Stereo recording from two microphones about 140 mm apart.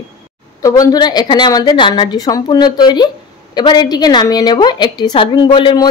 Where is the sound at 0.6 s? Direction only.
25° left (ahead or behind).